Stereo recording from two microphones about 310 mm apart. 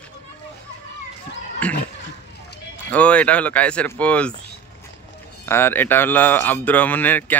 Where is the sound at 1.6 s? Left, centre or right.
Centre.